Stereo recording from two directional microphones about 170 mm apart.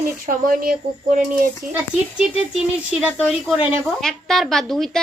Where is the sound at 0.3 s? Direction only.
55° right (ahead or behind).